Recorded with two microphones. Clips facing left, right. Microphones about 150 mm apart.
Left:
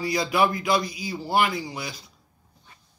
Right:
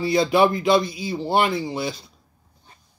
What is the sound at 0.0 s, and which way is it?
Speech, 25° right (ahead or behind).